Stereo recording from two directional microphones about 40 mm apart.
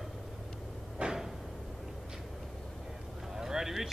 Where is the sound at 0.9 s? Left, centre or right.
Centre.